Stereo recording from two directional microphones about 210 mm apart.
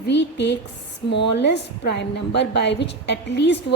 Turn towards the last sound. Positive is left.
turn(degrees=55)  # may be behind; listen again after turning